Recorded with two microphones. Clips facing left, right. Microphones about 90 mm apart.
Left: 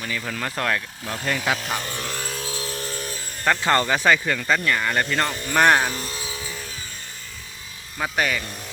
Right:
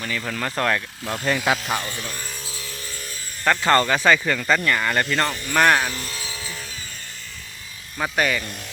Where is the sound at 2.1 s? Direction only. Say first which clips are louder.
Left 4 dB; 85° left; by 3.1 s 55° left (ahead or behind).